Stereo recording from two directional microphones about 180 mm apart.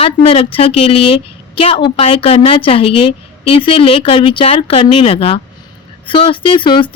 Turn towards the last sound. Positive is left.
turn(degrees=30)  # may be behind; listen again after turning